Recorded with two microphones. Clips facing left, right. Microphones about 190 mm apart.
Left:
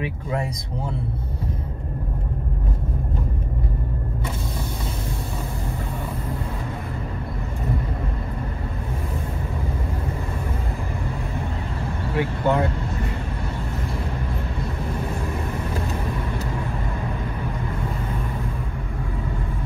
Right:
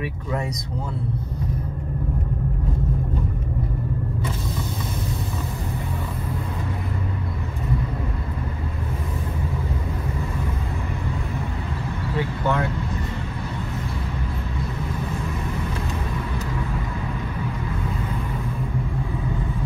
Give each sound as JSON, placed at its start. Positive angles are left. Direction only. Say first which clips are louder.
{"t": 12.2, "sound": "vehicle", "louder": "left 3 dB", "side_deg": 15}